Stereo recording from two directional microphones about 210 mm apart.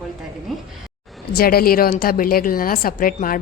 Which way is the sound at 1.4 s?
45° left (ahead or behind).